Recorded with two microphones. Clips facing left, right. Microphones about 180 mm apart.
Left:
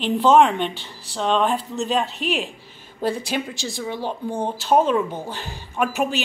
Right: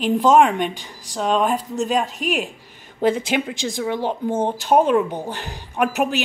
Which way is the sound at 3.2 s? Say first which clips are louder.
Right 4 dB; 20° right (ahead or behind).